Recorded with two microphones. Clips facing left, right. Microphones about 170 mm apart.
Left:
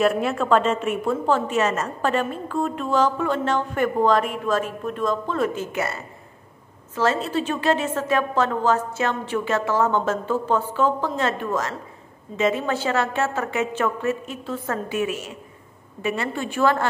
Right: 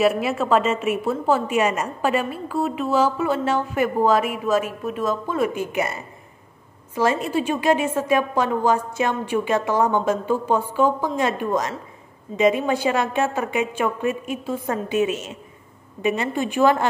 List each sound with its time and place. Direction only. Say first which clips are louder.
0.0 s a woman's voice: right 1 dB; 5° right (ahead or behind)